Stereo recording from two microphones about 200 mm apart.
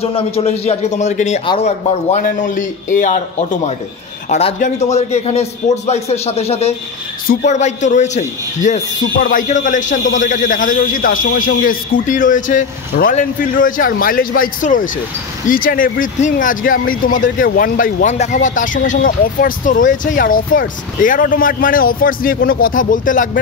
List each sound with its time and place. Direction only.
0.0 s a man's voice: 30° left (ahead or behind)
4.3 s a man's voice: 30° left (ahead or behind)